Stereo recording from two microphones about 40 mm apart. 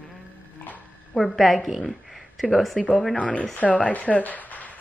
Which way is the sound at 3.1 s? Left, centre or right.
Left.